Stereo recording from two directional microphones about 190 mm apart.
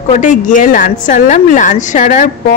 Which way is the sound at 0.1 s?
40° left (ahead or behind).